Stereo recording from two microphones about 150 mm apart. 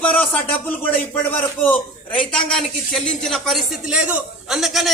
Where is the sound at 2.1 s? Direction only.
5° left (ahead or behind).